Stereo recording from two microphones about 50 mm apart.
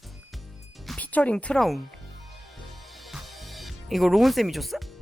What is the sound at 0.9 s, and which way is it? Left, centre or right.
Music, left.